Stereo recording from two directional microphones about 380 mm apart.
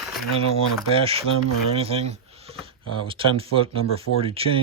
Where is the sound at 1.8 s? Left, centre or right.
Centre.